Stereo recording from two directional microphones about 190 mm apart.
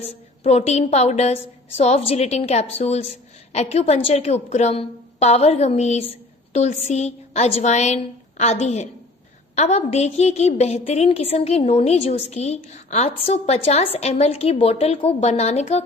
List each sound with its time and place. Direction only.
0.4 s a woman's voice: 35° left (ahead or behind)